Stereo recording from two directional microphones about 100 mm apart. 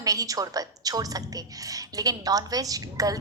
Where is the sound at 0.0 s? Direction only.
35° right (ahead or behind).